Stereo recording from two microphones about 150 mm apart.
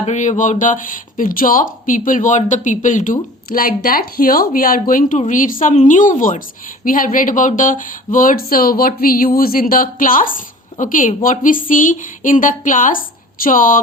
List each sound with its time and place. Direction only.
0.0 s speech: 55° left (ahead or behind)